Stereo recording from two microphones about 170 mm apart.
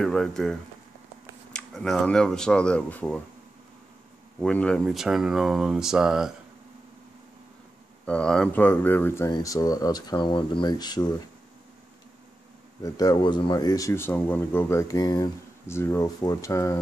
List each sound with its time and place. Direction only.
0.0 s speech: 5° left (ahead or behind)
4.4 s speech: 5° left (ahead or behind)
8.0 s speech: 5° left (ahead or behind); by 11.1 s 25° left (ahead or behind)
12.8 s speech: 20° left (ahead or behind)